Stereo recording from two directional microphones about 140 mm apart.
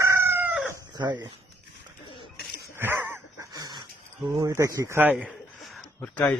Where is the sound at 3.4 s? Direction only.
25° right (ahead or behind).